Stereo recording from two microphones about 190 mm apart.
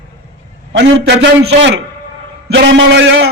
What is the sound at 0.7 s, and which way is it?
A man's voice, 70° right (ahead or behind).